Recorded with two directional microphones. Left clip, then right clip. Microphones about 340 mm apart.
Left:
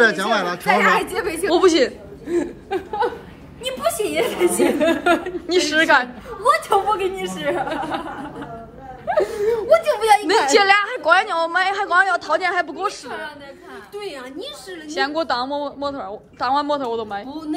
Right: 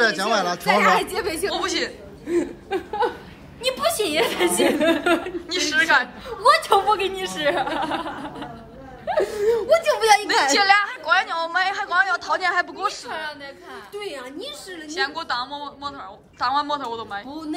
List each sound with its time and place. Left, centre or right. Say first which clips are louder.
0.0 s a woman's voice: left 3 dB; centre
0.8 s a woman's voice: left 1 dB; centre
1.3 s a woman's voice: left 8 dB; centre